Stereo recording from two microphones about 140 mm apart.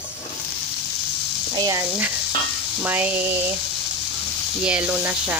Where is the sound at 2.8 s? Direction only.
10° right (ahead or behind).